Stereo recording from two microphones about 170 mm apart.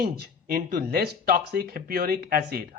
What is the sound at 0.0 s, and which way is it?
Speech, 60° right (ahead or behind).